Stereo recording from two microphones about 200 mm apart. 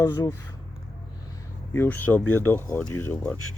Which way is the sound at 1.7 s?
10° left (ahead or behind).